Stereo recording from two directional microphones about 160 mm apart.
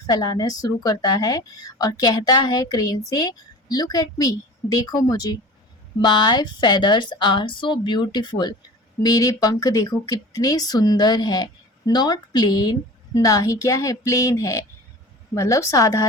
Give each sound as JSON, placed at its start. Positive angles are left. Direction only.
{"t": 0.1, "sound": "a woman's voice", "side_deg": 25}